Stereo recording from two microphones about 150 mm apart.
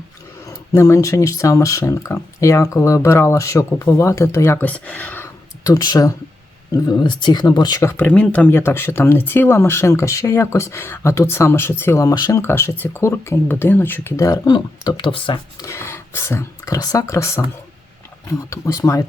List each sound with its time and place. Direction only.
0.4 s speech: 20° left (ahead or behind)
15.6 s speech: 15° left (ahead or behind)